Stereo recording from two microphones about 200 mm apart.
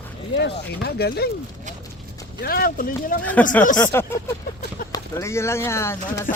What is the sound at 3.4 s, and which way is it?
Speech, 5° left (ahead or behind).